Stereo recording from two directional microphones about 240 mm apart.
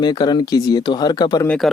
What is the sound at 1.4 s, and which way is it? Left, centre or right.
Speech, centre.